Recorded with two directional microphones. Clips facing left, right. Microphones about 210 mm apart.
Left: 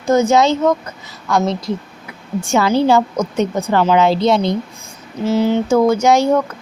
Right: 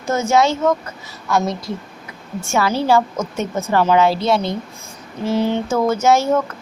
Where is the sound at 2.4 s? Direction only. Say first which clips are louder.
Left 3 dB; 15° left (ahead or behind).